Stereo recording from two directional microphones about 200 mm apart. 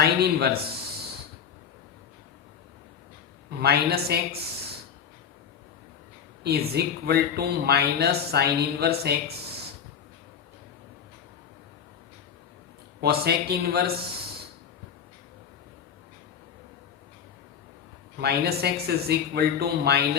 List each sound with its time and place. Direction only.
0.0 s speech: 50° right (ahead or behind)
3.6 s speech: 50° right (ahead or behind)
6.4 s speech: 55° right (ahead or behind)
13.0 s speech: 50° right (ahead or behind)
18.2 s speech: 55° right (ahead or behind)